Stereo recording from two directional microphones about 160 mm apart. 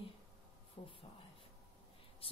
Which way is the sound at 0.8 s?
40° left (ahead or behind).